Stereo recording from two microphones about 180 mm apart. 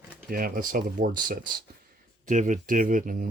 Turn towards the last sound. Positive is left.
turn(degrees=-45)  # may be behind; listen again after turning